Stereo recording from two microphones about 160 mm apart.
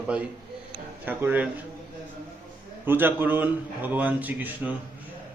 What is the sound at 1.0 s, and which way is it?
Speech, 10° right (ahead or behind).